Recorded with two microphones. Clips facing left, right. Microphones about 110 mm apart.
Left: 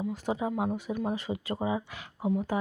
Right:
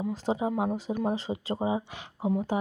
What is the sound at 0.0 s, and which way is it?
Speech, 30° right (ahead or behind).